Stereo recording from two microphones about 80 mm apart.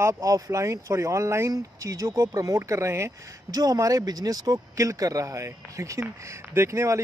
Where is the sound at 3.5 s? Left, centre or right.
Right.